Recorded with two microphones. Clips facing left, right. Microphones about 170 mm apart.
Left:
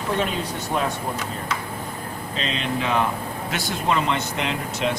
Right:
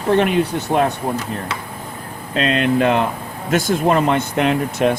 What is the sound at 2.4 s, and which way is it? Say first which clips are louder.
Speech: right 11 dB; 60° right (ahead or behind).